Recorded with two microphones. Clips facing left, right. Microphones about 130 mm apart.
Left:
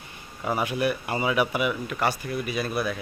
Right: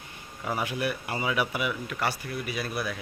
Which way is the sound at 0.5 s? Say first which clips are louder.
Left 4 dB; 20° left (ahead or behind).